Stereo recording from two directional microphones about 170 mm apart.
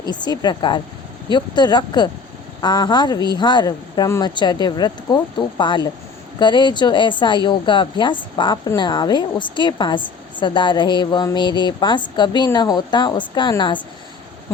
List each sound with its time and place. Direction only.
0.0 s speech: 25° left (ahead or behind)